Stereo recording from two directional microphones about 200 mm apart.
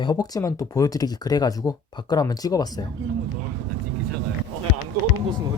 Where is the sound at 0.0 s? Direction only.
20° left (ahead or behind).